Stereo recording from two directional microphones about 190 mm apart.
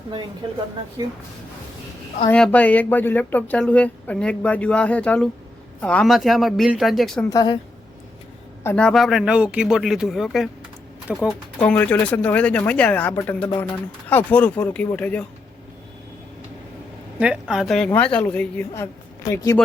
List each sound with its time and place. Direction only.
0.4 s speech: 25° right (ahead or behind)
2.3 s speech: 5° left (ahead or behind)
7.3 s speech: 20° left (ahead or behind)
8.6 s speech: 5° left (ahead or behind)
17.2 s speech: 5° right (ahead or behind)